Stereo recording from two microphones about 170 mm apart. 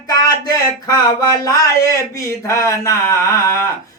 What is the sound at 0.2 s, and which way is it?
Speech, 20° left (ahead or behind).